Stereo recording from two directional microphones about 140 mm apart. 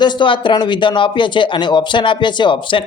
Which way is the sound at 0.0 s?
35° left (ahead or behind).